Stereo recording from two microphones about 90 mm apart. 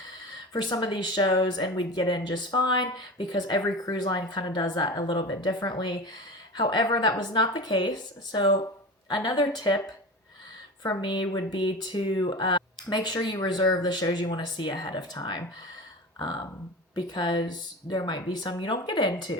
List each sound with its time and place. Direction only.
0.5 s speech: 55° left (ahead or behind)